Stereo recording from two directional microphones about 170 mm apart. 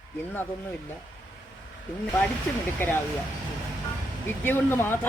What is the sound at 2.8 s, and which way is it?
Speech, 10° left (ahead or behind).